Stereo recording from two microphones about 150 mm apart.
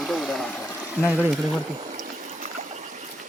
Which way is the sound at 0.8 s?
10° right (ahead or behind).